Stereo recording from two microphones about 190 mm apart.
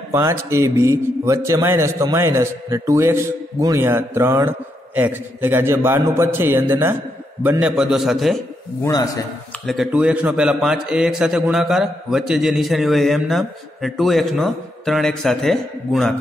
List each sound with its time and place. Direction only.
0.1 s a man's voice: 15° right (ahead or behind)
8.8 s a man's voice: 20° left (ahead or behind)
9.7 s a man's voice: centre (ahead or behind)